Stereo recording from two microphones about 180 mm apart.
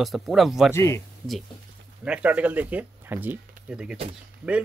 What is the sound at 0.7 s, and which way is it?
Speech, 15° left (ahead or behind).